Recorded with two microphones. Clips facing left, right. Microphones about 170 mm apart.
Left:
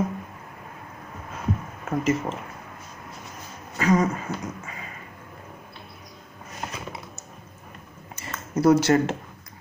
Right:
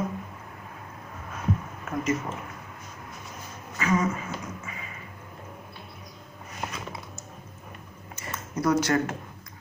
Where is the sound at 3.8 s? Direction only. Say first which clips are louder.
Left 4 dB; 35° left (ahead or behind).